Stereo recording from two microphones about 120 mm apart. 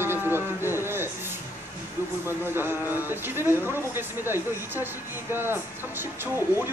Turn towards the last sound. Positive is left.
turn(degrees=-20)  # may be behind; listen again after turning